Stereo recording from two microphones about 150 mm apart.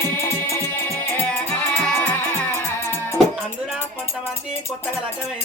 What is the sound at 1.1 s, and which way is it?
Music, 10° left (ahead or behind).